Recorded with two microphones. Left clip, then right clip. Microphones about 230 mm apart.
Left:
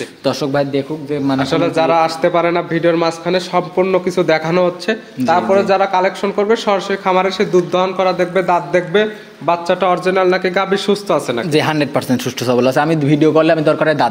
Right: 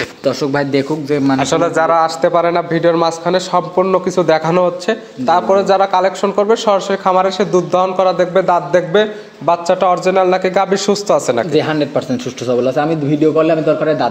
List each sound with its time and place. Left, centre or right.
0.2 s a man's voice: centre
0.7 s a man's voice: right
1.8 s a man's voice: centre
11.5 s a man's voice: left